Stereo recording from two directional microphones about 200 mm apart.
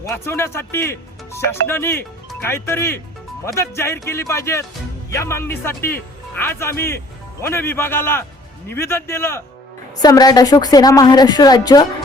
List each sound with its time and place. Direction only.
0.0 s a woman's voice: 15° left (ahead or behind)